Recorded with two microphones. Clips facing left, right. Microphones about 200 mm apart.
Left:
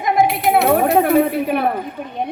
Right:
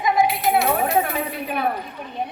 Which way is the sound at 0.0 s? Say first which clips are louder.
Left 3 dB; 55° left (ahead or behind).